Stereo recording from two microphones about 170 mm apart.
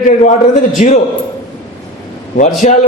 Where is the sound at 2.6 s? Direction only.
45° left (ahead or behind).